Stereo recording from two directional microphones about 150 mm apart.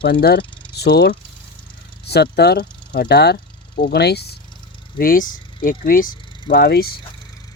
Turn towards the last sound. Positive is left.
turn(degrees=90)